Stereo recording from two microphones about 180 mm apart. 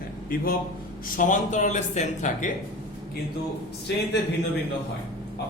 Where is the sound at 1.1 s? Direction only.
45° left (ahead or behind).